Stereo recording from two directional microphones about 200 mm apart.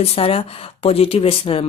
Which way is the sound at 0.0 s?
30° left (ahead or behind).